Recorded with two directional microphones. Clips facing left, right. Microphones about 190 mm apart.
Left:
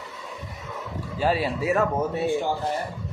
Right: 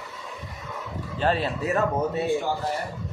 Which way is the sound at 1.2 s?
10° left (ahead or behind).